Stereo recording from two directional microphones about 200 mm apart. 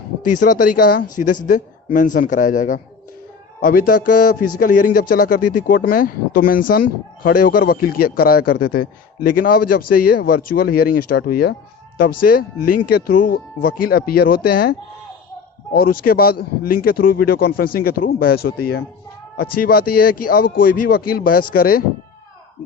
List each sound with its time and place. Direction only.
0.3 s speech: 40° left (ahead or behind)